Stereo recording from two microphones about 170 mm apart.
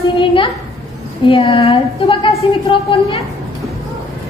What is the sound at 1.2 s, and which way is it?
A woman's voice, 35° left (ahead or behind).